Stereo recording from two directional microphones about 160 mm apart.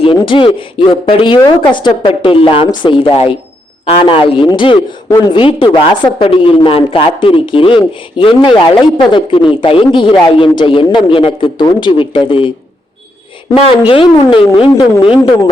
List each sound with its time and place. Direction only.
0.0 s a woman's voice: 30° left (ahead or behind)
13.8 s a woman's voice: 35° left (ahead or behind)